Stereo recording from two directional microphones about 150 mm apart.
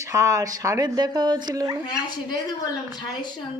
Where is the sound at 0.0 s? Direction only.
20° right (ahead or behind).